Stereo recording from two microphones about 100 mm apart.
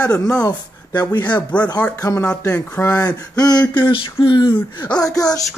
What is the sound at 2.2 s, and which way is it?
Speech, 10° left (ahead or behind).